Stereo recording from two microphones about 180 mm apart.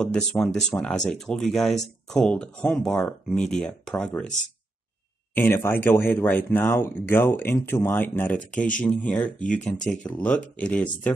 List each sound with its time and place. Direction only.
0.0 s speech: 5° left (ahead or behind)
5.3 s speech: 10° left (ahead or behind)
8.5 s speech: 45° left (ahead or behind)
8.8 s speech: 5° left (ahead or behind)